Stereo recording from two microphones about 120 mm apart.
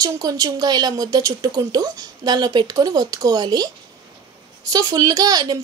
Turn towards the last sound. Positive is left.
turn(degrees=-30)  # may be behind; listen again after turning